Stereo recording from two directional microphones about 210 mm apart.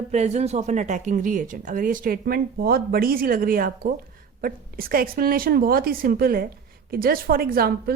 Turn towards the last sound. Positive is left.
turn(degrees=-45)  # may be behind; listen again after turning